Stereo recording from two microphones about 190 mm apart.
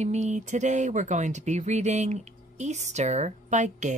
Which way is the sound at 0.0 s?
35° right (ahead or behind).